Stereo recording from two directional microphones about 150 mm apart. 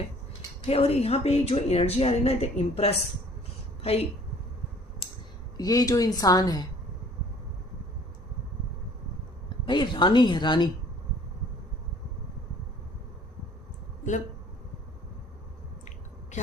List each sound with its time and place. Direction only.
0.6 s a woman's voice: 40° left (ahead or behind)
5.5 s a woman's voice: 25° left (ahead or behind)
9.6 s speech: 30° left (ahead or behind)